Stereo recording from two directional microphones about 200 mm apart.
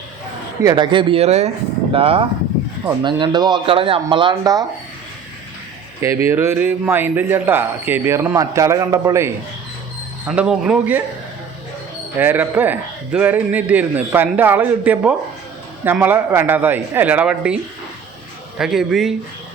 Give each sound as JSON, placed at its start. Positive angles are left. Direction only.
{"t": 0.6, "sound": "speech", "side_deg": -20}
{"t": 6.0, "sound": "speech", "side_deg": -15}
{"t": 10.2, "sound": "speech", "side_deg": -5}
{"t": 12.1, "sound": "speech", "side_deg": -10}